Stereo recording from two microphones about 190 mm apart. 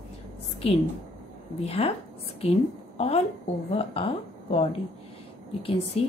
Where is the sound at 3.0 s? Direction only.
35° left (ahead or behind).